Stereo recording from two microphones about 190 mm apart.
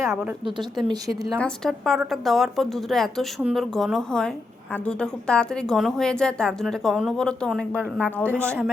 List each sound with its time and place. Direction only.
0.9 s speech: 20° right (ahead or behind)
1.4 s a woman's voice: 5° left (ahead or behind)